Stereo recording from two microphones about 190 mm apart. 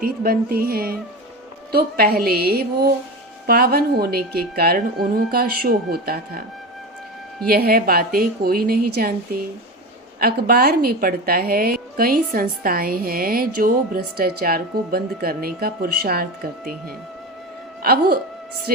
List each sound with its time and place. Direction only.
0.0 s a woman's voice: 50° right (ahead or behind)
7.4 s a woman's voice: 50° right (ahead or behind)
17.8 s a woman's voice: 55° right (ahead or behind)